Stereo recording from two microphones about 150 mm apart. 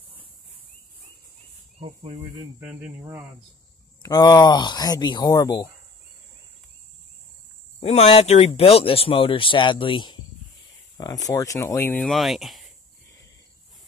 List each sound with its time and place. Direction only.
1.8 s speech: 50° right (ahead or behind)
2.6 s speech: 10° right (ahead or behind)
4.0 s speech: 25° left (ahead or behind)
7.8 s speech: 45° left (ahead or behind); by 12.1 s 15° left (ahead or behind)
12.1 s speech: centre (ahead or behind)